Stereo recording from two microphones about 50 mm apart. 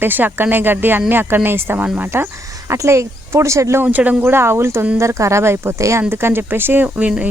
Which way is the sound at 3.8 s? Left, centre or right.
Right.